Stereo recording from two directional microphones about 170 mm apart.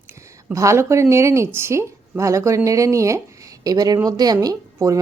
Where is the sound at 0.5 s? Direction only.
15° right (ahead or behind).